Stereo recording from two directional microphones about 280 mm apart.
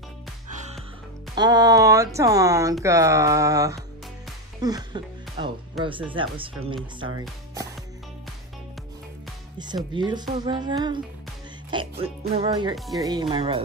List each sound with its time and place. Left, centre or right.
0.5 s music: right
1.3 s speech: centre
9.6 s speech: centre
12.0 s speech: centre